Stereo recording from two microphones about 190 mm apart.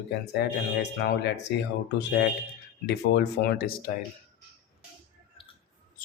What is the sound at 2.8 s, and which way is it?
Speech, 60° left (ahead or behind).